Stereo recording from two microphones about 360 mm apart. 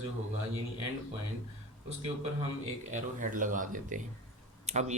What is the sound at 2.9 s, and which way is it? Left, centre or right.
Speech, right.